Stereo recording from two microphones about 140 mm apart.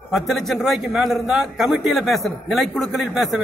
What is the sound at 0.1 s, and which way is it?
A man's voice, centre (ahead or behind).